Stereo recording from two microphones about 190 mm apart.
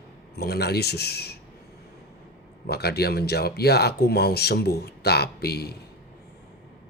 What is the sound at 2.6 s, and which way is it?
Speech, 60° left (ahead or behind).